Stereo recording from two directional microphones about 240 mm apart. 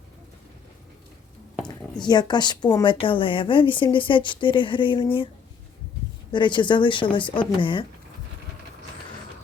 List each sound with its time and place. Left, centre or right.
2.0 s a woman's voice: centre
6.3 s a woman's voice: centre